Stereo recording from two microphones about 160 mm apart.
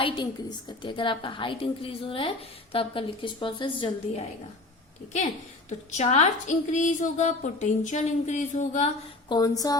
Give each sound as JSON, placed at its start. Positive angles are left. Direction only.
{"t": 0.0, "sound": "a woman's voice", "side_deg": 30}
{"t": 5.1, "sound": "a sound", "side_deg": 45}
{"t": 9.3, "sound": "speech", "side_deg": 25}